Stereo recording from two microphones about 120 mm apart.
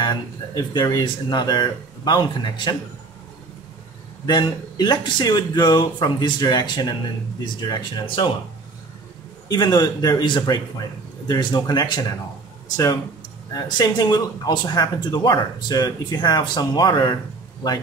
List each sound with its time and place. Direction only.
0.0 s speech: 35° left (ahead or behind)
4.3 s speech: 35° left (ahead or behind)
9.5 s speech: 35° left (ahead or behind)